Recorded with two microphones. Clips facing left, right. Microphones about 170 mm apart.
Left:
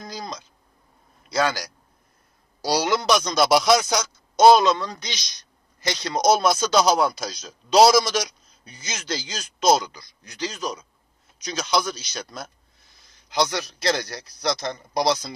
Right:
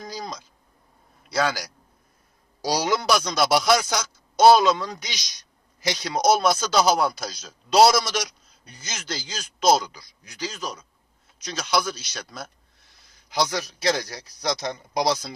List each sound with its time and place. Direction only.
0.1 s a sound: 10° right (ahead or behind)
1.2 s a man's voice: centre (ahead or behind)
2.7 s a man's voice: 15° right (ahead or behind)
3.2 s a man's voice: centre (ahead or behind)